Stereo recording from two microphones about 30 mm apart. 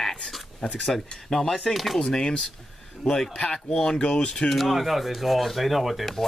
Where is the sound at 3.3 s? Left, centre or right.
Left.